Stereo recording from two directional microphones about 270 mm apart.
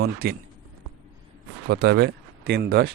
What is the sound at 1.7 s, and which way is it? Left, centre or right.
Speech, right.